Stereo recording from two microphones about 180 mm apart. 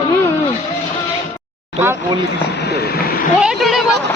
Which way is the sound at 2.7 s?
65° left (ahead or behind).